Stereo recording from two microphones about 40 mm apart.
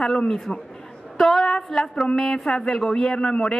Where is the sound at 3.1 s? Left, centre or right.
Left.